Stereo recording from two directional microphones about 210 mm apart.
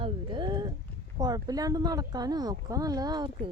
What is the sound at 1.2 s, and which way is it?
Speech, 20° right (ahead or behind).